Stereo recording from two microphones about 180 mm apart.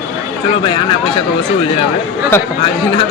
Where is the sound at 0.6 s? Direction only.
30° left (ahead or behind).